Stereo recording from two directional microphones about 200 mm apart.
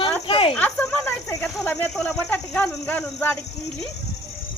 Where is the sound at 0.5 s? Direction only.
5° left (ahead or behind).